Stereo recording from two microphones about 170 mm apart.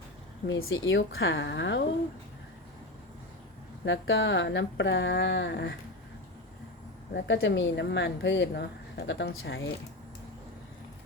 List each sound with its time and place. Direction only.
0.4 s speech: 90° left
3.8 s speech: 90° left
7.2 s speech: 90° left